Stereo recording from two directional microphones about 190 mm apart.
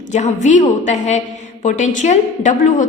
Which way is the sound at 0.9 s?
40° left (ahead or behind).